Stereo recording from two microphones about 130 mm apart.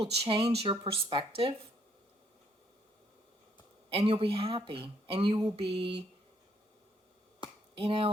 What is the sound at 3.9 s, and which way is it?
Speech, 45° right (ahead or behind).